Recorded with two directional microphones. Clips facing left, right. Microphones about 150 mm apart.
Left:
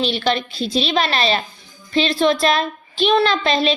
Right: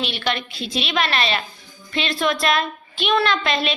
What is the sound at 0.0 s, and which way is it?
A woman's voice, 35° left (ahead or behind).